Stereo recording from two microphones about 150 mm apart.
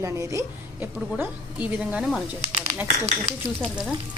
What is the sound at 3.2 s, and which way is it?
Speech, centre (ahead or behind).